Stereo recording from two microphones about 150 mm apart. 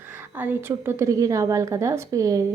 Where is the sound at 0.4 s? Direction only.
10° right (ahead or behind).